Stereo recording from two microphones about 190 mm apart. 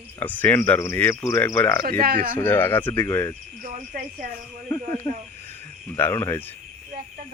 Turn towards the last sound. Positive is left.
turn(degrees=15)  # may be behind; listen again after turning